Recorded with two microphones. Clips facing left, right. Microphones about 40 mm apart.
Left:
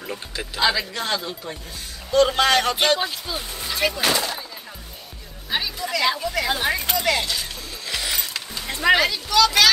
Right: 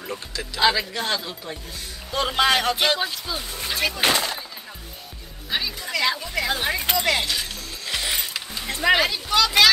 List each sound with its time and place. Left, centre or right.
0.6 s speech: centre
4.0 s speech: right
5.5 s speech: centre
7.0 s speech: centre
7.8 s a sound: centre
8.3 s a sound: centre
9.3 s speech: right